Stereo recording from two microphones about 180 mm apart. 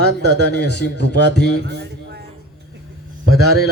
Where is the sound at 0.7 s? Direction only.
70° left (ahead or behind).